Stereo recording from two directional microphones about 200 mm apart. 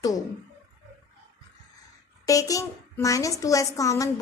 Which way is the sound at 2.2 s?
15° left (ahead or behind).